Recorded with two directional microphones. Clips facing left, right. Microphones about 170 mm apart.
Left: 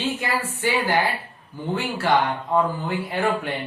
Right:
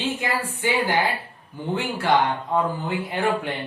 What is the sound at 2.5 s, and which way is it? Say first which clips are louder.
Speech: left 4 dB; 15° right (ahead or behind).